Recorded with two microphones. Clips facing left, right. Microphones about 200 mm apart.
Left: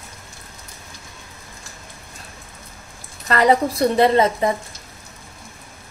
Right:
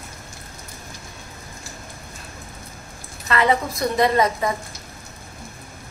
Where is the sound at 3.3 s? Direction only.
35° left (ahead or behind).